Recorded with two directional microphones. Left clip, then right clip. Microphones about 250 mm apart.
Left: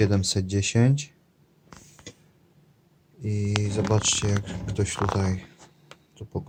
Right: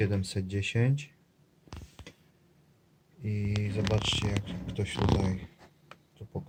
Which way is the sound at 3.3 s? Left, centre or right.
Centre.